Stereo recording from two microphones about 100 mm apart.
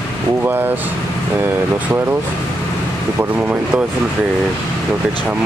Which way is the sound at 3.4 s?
15° right (ahead or behind).